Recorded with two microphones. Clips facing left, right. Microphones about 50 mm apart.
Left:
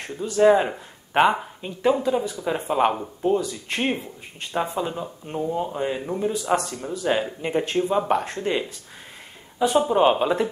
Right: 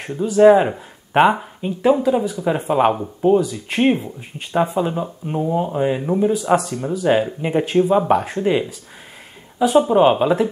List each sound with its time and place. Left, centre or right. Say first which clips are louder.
0.0 s speech: right 6 dB; centre
9.8 s speech: right 5 dB; centre